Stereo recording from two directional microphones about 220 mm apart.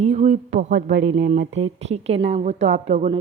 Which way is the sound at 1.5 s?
30° right (ahead or behind).